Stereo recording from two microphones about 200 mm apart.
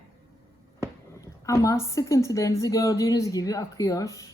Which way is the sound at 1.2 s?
15° left (ahead or behind).